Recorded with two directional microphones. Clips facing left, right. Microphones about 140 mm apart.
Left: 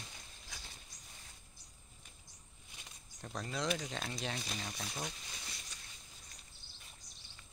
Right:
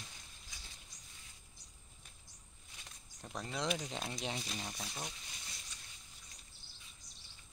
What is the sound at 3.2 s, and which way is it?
Speech, 10° right (ahead or behind).